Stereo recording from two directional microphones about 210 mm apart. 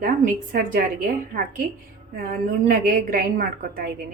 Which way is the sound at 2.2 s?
40° right (ahead or behind).